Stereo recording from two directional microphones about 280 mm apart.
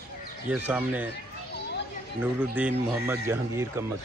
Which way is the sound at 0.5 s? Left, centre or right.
Centre.